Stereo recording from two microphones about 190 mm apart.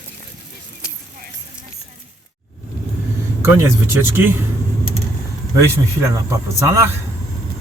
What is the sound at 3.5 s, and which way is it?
Speech, 10° right (ahead or behind).